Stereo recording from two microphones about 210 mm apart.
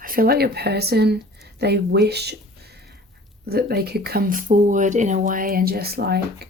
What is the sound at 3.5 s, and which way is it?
Speech, 45° right (ahead or behind).